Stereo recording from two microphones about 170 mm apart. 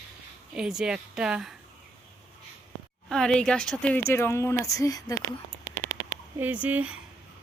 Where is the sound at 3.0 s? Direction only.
5° left (ahead or behind); by 5.2 s 20° left (ahead or behind).